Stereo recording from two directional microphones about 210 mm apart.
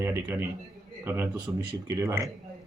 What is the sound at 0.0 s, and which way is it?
Speech, 10° right (ahead or behind).